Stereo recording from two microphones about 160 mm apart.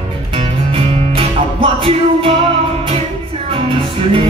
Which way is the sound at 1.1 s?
35° right (ahead or behind).